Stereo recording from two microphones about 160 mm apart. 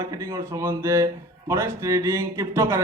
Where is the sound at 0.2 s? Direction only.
20° right (ahead or behind).